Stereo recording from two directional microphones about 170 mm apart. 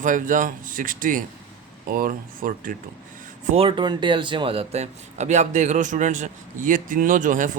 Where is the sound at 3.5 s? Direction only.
35° right (ahead or behind).